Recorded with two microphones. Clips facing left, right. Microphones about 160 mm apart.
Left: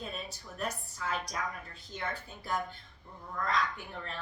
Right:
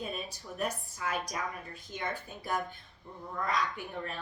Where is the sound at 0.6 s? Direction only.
15° right (ahead or behind).